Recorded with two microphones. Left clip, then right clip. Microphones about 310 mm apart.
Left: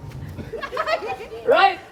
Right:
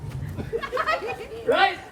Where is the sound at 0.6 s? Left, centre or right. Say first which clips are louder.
Left 1 dB; left.